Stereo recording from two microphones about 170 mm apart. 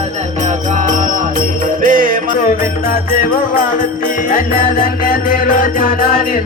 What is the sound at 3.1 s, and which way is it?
Music, 55° left (ahead or behind).